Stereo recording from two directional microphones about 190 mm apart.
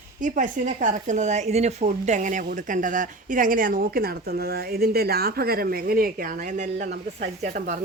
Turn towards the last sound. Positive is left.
turn(degrees=-40)  # may be behind; listen again after turning